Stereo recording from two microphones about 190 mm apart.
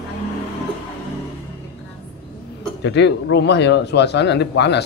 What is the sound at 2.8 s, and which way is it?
Speech, 65° left (ahead or behind).